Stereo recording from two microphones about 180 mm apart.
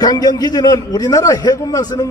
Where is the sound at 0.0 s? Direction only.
20° left (ahead or behind).